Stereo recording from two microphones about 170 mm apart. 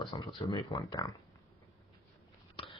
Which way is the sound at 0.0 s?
25° left (ahead or behind).